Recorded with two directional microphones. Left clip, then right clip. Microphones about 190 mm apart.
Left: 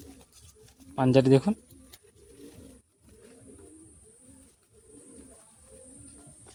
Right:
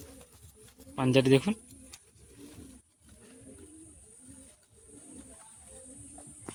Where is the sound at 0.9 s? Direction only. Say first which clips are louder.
Left 3 dB; 45° left (ahead or behind).